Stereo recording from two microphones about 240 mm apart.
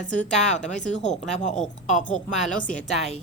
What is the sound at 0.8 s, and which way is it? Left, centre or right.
Speech, left.